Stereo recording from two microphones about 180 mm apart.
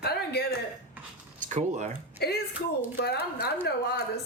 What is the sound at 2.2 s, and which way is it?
Speech, 60° left (ahead or behind).